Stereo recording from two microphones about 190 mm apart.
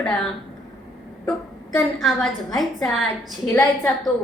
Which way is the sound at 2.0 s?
Centre (ahead or behind).